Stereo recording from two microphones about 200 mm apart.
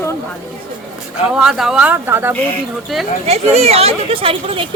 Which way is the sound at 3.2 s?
30° right (ahead or behind).